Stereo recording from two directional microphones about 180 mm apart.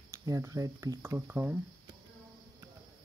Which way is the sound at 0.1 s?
20° right (ahead or behind).